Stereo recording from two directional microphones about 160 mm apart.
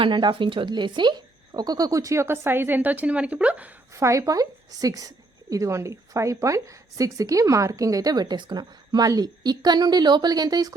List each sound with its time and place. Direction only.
0.0 s a woman's voice: 30° right (ahead or behind)